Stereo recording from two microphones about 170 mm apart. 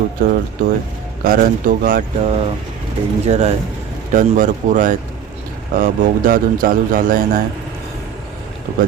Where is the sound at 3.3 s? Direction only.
40° right (ahead or behind).